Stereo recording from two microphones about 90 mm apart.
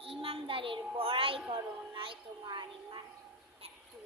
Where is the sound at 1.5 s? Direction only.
70° right (ahead or behind).